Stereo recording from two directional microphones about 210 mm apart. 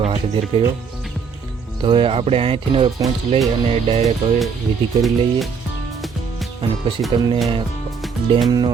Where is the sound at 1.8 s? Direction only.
25° right (ahead or behind).